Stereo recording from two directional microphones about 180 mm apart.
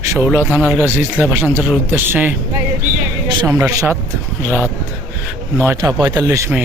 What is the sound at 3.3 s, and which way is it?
Speech, 20° right (ahead or behind).